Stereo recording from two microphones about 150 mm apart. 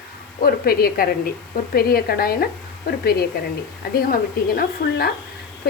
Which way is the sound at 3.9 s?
75° left (ahead or behind).